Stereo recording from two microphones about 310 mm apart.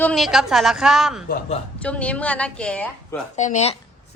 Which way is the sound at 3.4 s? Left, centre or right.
Left.